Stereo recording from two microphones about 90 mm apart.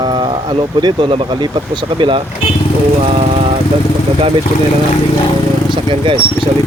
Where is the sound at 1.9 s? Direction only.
65° right (ahead or behind).